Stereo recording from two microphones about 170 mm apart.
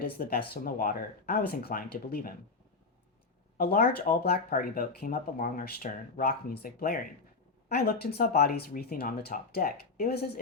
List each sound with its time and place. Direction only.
0.0 s speech: 60° left (ahead or behind)
3.6 s speech: 65° left (ahead or behind)